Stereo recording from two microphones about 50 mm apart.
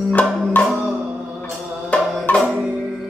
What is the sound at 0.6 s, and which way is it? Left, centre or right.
Music, left.